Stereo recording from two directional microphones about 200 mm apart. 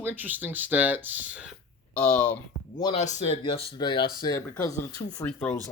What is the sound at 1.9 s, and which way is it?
Speech, 5° left (ahead or behind).